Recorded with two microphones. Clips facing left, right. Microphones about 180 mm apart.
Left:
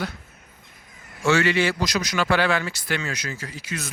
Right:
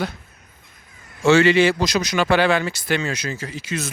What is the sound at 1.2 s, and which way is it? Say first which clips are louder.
Speech: right 6 dB; 25° right (ahead or behind).